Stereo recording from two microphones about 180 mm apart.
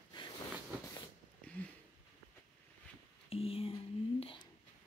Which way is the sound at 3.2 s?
30° left (ahead or behind).